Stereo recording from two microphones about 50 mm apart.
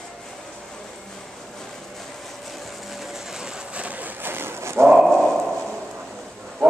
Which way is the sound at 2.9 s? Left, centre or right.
Centre.